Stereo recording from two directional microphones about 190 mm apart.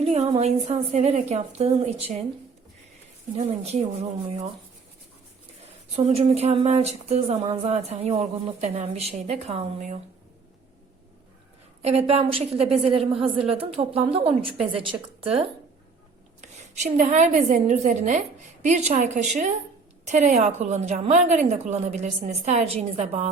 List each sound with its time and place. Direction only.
0.0 s a woman's voice: 35° right (ahead or behind)
3.3 s a woman's voice: 35° right (ahead or behind)
5.6 s a woman's voice: 35° right (ahead or behind)
11.8 s a woman's voice: 35° right (ahead or behind)
12.7 s a woman's voice: centre (ahead or behind)
13.5 s a woman's voice: 30° right (ahead or behind)